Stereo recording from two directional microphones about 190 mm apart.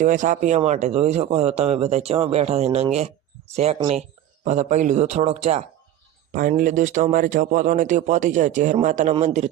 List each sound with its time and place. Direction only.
0.0 s a man's voice: 40° right (ahead or behind)